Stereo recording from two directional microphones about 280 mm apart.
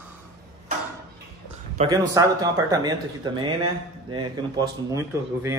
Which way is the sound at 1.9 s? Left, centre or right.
Centre.